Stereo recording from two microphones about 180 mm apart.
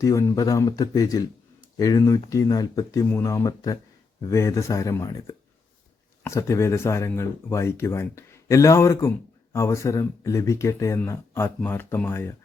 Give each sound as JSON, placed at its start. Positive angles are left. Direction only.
{"t": 0.0, "sound": "speech", "side_deg": 15}